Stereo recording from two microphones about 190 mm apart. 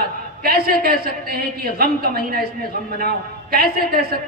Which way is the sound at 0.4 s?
50° right (ahead or behind).